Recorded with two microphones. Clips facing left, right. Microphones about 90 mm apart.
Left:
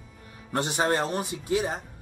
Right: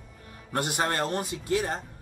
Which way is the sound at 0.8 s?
15° left (ahead or behind).